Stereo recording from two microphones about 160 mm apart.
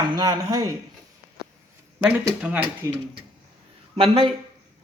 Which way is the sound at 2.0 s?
10° right (ahead or behind).